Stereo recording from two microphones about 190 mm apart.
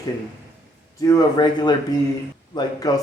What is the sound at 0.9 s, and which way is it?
A man's voice, 20° left (ahead or behind).